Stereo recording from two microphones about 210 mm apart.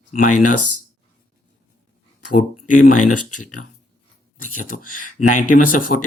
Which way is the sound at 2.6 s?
40° left (ahead or behind).